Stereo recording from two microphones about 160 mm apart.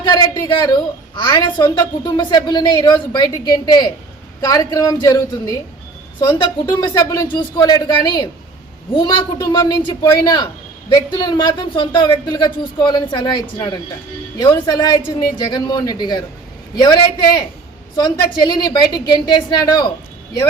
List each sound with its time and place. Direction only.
0.0 s a woman's voice: 25° left (ahead or behind)